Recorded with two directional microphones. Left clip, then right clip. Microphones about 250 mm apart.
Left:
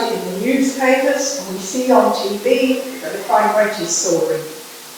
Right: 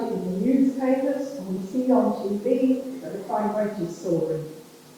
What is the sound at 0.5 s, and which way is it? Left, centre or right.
Speech, centre.